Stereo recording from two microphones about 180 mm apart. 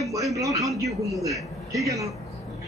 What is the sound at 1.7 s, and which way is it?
Speech, 15° right (ahead or behind).